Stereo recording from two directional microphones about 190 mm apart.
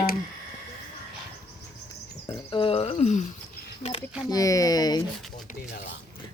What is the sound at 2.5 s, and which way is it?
Speech, 30° left (ahead or behind).